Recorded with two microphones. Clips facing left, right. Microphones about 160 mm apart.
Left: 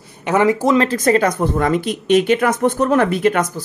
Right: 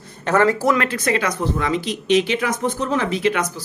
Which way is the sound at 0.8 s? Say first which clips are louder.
Left 6 dB; 40° left (ahead or behind).